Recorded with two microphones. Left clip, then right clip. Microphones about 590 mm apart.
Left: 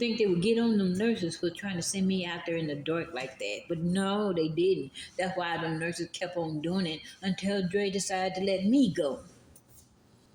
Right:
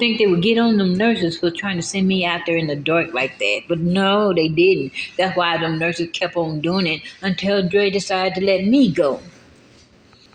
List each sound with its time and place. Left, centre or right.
0.0 s speech: left